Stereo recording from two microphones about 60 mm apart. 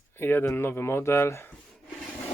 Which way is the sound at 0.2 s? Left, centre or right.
Left.